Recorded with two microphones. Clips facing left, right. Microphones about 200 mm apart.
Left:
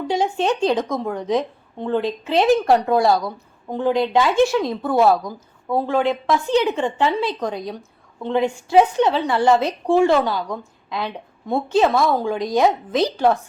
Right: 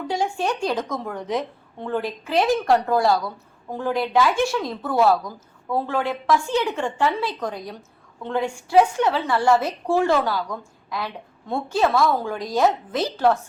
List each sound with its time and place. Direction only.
0.1 s speech: 20° left (ahead or behind)